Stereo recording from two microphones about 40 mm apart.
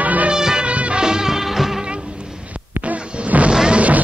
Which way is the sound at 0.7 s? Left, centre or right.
Right.